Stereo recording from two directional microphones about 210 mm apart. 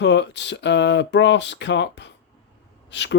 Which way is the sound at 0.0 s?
55° left (ahead or behind).